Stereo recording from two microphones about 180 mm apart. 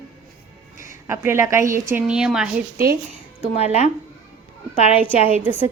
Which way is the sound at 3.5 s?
35° left (ahead or behind).